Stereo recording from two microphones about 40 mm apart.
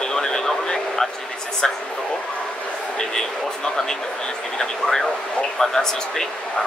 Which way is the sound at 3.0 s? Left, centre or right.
Centre.